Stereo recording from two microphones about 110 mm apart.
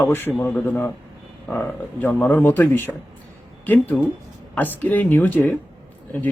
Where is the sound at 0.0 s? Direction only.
20° left (ahead or behind).